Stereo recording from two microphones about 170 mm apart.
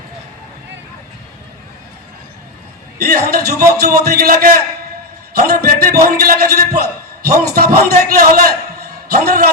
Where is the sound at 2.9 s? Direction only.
65° right (ahead or behind).